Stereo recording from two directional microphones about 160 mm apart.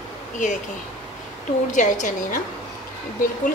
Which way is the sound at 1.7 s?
50° left (ahead or behind).